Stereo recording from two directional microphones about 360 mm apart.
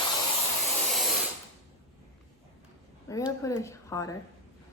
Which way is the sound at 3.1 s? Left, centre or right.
Centre.